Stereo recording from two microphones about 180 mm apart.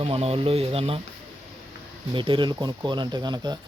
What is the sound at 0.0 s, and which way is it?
Speech, 30° right (ahead or behind).